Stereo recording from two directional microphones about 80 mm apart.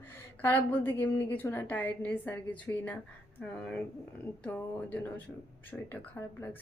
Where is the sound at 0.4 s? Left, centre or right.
Left.